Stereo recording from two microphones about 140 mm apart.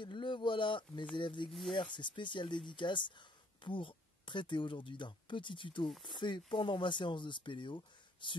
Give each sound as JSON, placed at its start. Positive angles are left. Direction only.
{"t": 0.0, "sound": "speech", "side_deg": 35}